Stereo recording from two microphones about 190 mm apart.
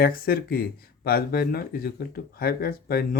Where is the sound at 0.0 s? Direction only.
50° left (ahead or behind).